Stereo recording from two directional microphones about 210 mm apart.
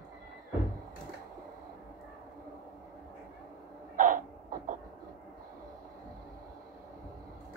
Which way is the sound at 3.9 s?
40° right (ahead or behind).